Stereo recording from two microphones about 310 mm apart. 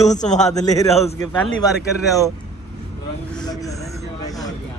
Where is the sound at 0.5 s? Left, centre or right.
Centre.